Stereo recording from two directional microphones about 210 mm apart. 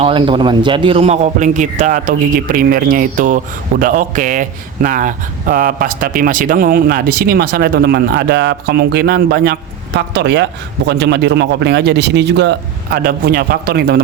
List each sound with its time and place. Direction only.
0.0 s a man's voice: 25° right (ahead or behind); by 14.0 s 45° right (ahead or behind)